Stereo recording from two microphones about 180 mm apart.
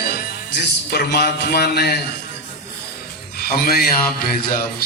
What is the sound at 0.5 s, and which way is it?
A man's voice, 60° left (ahead or behind).